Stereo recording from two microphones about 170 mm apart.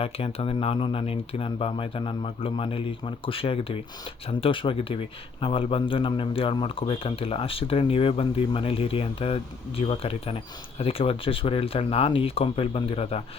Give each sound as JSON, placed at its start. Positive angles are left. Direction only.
{"t": 0.0, "sound": "speech", "side_deg": 35}